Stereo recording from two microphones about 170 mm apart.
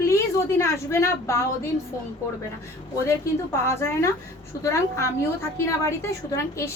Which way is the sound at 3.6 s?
15° left (ahead or behind).